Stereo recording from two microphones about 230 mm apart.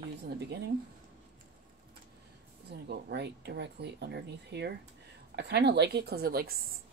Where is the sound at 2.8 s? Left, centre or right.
Right.